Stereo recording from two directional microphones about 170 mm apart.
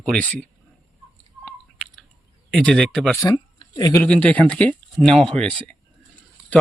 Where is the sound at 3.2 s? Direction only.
20° left (ahead or behind).